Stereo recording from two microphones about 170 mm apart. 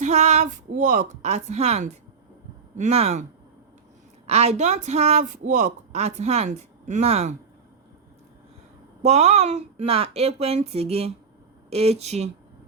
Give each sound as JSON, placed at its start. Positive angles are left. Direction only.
{"t": 0.0, "sound": "speech", "side_deg": -40}
{"t": 4.3, "sound": "speech", "side_deg": -40}
{"t": 9.0, "sound": "speech", "side_deg": -40}